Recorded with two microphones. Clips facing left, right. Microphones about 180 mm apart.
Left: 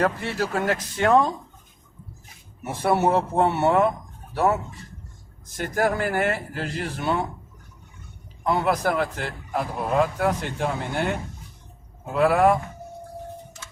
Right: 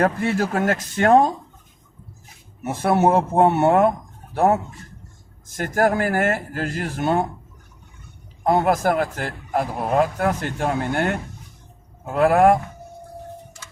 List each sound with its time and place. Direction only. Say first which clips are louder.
0.0 s speech: right 4 dB; 45° right (ahead or behind)
2.6 s speech: right 3 dB; 50° right (ahead or behind)
8.4 s speech: right 4 dB; 50° right (ahead or behind)
12.1 s speech: right 3 dB; 50° right (ahead or behind)